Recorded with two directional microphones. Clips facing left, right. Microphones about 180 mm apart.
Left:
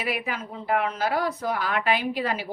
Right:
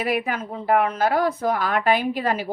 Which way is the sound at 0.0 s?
50° right (ahead or behind).